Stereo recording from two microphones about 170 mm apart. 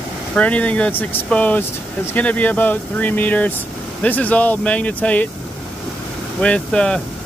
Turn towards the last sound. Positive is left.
turn(degrees=5)  # may be behind; listen again after turning